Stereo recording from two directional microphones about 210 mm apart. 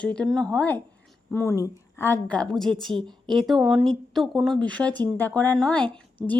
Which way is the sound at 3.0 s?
20° right (ahead or behind).